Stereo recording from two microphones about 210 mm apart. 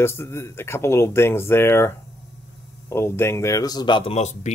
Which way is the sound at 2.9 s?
10° left (ahead or behind).